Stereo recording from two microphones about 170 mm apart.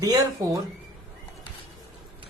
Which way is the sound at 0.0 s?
20° right (ahead or behind).